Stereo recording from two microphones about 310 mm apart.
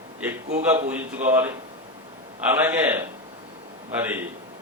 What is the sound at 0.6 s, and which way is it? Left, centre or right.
A man's voice, centre.